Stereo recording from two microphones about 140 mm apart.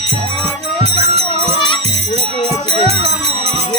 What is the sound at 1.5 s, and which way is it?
Music, 35° left (ahead or behind).